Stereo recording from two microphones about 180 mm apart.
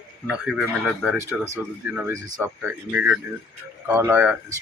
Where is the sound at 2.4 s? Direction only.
10° right (ahead or behind).